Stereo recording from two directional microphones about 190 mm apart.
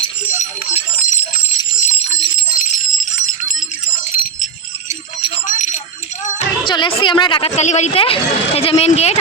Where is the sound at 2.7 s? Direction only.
45° left (ahead or behind).